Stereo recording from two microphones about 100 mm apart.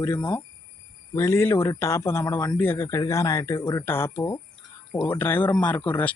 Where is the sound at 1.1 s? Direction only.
30° left (ahead or behind).